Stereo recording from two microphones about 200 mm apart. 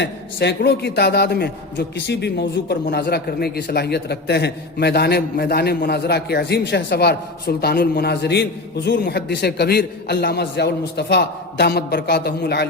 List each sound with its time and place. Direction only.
0.0 s a man's voice: 55° left (ahead or behind)